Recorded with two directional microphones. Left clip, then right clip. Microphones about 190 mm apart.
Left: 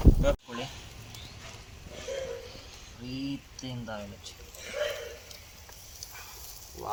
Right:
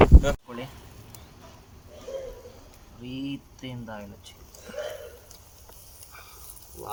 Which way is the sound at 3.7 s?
10° right (ahead or behind).